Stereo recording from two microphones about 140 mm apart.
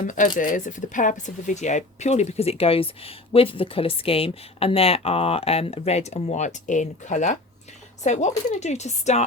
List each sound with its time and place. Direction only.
0.0 s speech: 65° left (ahead or behind)